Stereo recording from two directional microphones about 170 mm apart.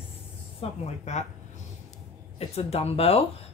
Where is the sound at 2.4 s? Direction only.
35° left (ahead or behind).